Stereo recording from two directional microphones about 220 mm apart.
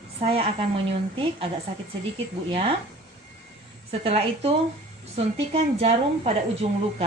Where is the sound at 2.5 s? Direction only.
25° right (ahead or behind).